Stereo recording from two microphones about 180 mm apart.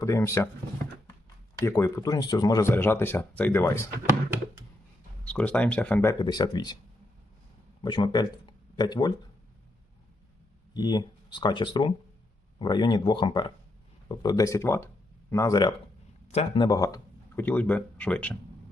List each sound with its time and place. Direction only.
0.0 s speech: 15° left (ahead or behind)
1.6 s speech: 15° left (ahead or behind)
5.2 s speech: 5° left (ahead or behind); by 6.7 s 25° left (ahead or behind)
7.8 s speech: 25° left (ahead or behind)
10.8 s speech: 25° left (ahead or behind)
16.3 s speech: 35° left (ahead or behind)
16.6 s speech: 20° left (ahead or behind)